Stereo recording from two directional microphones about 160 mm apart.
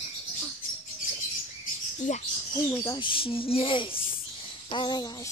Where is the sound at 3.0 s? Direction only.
35° left (ahead or behind).